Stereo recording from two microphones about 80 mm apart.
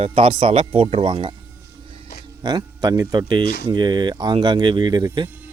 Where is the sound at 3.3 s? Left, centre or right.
Right.